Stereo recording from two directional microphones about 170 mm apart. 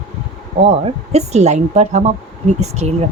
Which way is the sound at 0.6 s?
35° right (ahead or behind).